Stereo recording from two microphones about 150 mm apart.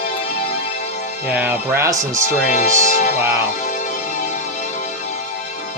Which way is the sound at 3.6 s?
55° left (ahead or behind).